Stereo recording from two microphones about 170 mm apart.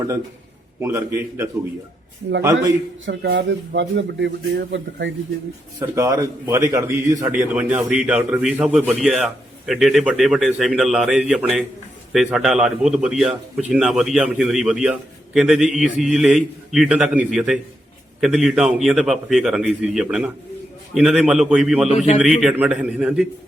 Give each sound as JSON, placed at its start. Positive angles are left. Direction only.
{"t": 0.8, "sound": "a man's voice", "side_deg": -15}
{"t": 3.1, "sound": "speech", "side_deg": -80}
{"t": 5.9, "sound": "a man's voice", "side_deg": -20}